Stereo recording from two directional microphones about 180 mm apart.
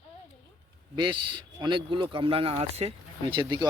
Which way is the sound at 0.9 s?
25° right (ahead or behind).